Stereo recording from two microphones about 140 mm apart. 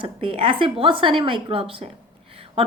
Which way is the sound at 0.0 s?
40° right (ahead or behind).